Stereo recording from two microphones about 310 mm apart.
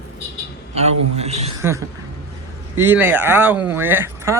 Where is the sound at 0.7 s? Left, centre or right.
Centre.